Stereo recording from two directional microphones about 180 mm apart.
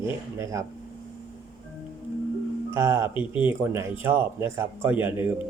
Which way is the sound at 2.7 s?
15° right (ahead or behind).